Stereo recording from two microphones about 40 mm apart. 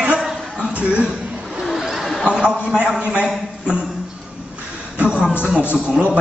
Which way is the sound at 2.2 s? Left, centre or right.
Right.